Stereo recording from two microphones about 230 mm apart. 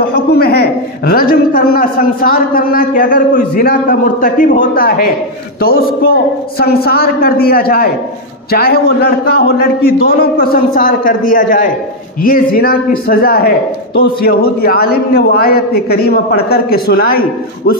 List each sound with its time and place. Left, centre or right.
0.1 s a man's voice: left